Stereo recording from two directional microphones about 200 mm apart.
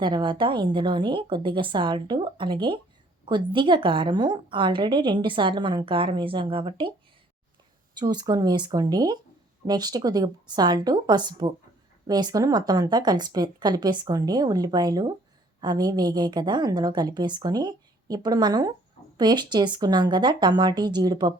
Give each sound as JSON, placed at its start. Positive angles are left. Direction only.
{"t": 0.0, "sound": "a woman's voice", "side_deg": -25}
{"t": 7.9, "sound": "a woman's voice", "side_deg": -20}